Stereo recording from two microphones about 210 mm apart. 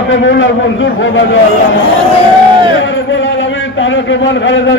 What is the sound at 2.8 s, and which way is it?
A man's voice, 65° left (ahead or behind).